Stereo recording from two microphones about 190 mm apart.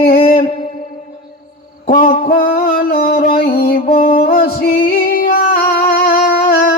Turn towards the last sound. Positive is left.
turn(degrees=55)  # may be behind; listen again after turning